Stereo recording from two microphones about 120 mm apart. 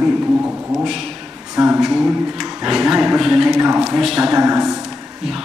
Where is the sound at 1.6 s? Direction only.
5° right (ahead or behind).